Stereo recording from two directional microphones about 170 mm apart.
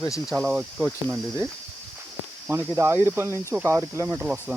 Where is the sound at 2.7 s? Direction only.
15° right (ahead or behind).